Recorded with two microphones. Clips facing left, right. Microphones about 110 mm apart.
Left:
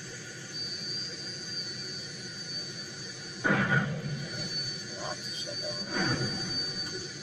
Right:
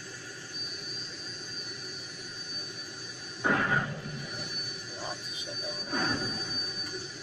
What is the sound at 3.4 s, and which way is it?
Music, 40° right (ahead or behind).